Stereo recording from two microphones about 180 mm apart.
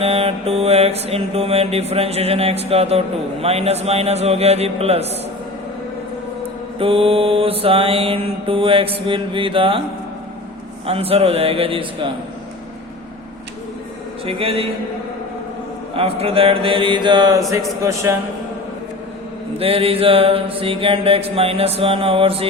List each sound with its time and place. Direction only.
0.0 s mantra: 35° right (ahead or behind)
6.7 s mantra: 30° right (ahead or behind)
10.8 s mantra: 30° right (ahead or behind)
14.3 s mantra: 30° right (ahead or behind)
16.0 s a man's voice: 30° right (ahead or behind); by 18.2 s 15° right (ahead or behind)
19.5 s mantra: 30° right (ahead or behind)